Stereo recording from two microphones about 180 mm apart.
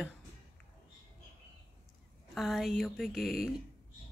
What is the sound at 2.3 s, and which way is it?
Speech, centre (ahead or behind).